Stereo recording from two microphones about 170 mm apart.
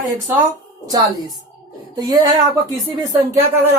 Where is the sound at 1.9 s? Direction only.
20° right (ahead or behind).